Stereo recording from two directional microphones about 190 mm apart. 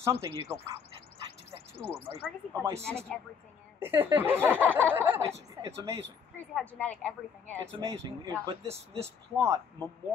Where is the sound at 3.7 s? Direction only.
10° right (ahead or behind).